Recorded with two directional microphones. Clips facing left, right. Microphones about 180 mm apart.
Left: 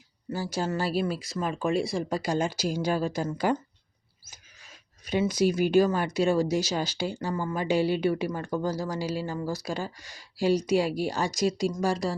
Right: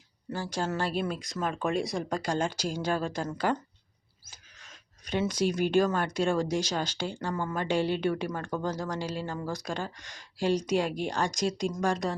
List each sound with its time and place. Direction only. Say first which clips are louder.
0.5 s speech: left 2 dB; 5° left (ahead or behind)